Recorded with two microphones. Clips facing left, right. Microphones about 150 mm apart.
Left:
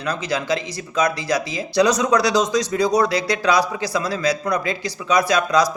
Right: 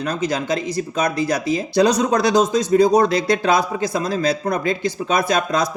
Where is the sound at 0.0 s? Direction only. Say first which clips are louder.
Right 2 dB; 50° right (ahead or behind).